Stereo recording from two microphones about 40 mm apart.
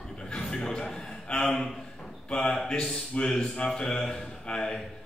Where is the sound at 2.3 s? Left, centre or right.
Left.